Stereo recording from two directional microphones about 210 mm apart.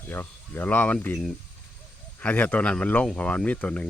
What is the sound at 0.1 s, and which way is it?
Speech, 10° left (ahead or behind).